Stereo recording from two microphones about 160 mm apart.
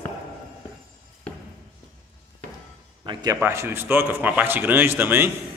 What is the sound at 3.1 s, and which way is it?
Speech, 25° right (ahead or behind).